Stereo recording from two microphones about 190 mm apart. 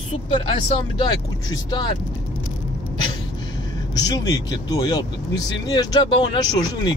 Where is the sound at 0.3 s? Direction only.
25° left (ahead or behind).